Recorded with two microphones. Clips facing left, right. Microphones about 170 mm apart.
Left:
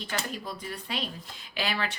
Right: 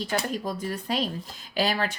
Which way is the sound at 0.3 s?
45° right (ahead or behind).